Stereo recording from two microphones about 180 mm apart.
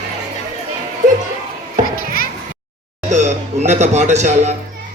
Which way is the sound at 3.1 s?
40° right (ahead or behind).